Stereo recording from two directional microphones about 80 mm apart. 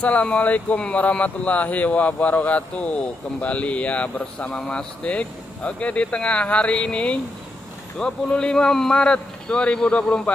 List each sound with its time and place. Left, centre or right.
0.0 s speech: centre